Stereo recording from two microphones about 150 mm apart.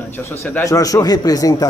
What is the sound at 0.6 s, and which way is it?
Speech, 25° left (ahead or behind).